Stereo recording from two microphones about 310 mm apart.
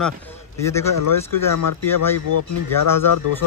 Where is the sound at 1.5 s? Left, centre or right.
Left.